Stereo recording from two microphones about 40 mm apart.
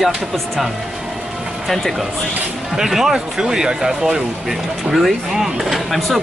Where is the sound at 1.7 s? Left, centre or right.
Centre.